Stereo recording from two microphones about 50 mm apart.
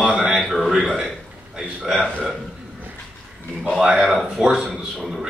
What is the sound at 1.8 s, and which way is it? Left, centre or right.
Speech, centre.